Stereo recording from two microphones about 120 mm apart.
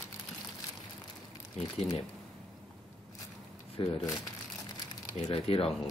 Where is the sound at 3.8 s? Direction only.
45° left (ahead or behind).